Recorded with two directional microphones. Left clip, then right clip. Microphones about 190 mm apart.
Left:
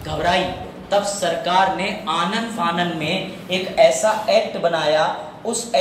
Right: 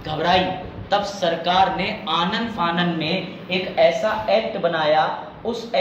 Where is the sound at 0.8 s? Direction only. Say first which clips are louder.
Left 1 dB; 40° right (ahead or behind).